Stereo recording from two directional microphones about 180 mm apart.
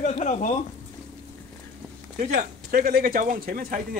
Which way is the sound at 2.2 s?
45° right (ahead or behind).